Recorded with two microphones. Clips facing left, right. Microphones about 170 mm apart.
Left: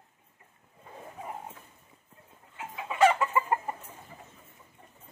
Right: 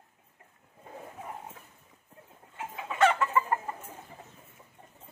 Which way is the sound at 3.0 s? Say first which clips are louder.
Left 1 dB; 10° left (ahead or behind).